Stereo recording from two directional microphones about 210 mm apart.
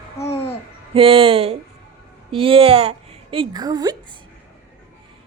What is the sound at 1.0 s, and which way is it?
A woman's voice, 25° right (ahead or behind).